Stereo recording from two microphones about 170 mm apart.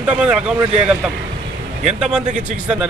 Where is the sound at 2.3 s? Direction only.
45° right (ahead or behind).